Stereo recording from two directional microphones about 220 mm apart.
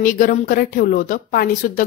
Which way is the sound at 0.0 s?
40° left (ahead or behind).